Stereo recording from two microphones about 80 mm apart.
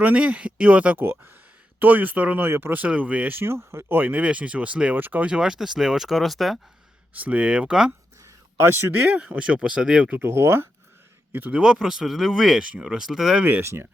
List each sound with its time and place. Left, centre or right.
0.0 s speech: centre
3.4 s speech: right; by 6.6 s centre
7.2 s speech: centre
8.2 s speech: right
9.3 s speech: centre
10.2 s speech: right
11.5 s speech: centre
13.4 s speech: right